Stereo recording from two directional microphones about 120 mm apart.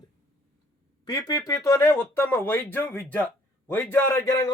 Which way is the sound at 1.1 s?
30° left (ahead or behind).